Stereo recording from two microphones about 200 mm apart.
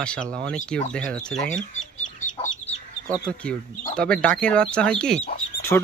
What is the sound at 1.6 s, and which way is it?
Chicken, 40° left (ahead or behind).